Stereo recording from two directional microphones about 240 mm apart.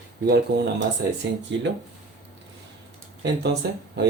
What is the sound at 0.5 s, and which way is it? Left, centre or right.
Speech, right.